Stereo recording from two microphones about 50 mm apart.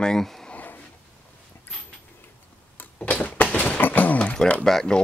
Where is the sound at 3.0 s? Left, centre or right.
Left.